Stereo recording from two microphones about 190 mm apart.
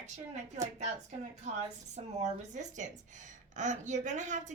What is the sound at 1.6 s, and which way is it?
A woman's voice, 40° right (ahead or behind).